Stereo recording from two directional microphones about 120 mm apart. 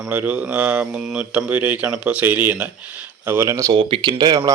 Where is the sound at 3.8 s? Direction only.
40° right (ahead or behind).